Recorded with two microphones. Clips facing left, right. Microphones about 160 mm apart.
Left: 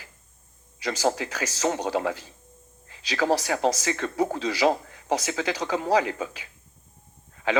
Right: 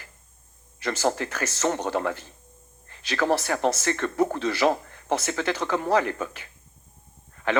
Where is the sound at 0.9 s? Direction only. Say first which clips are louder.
Even; 50° right (ahead or behind).